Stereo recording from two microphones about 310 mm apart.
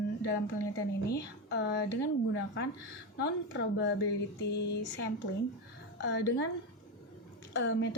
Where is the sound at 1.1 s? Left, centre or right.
Left.